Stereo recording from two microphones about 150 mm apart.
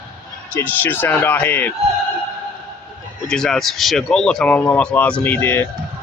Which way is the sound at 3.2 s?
5° left (ahead or behind).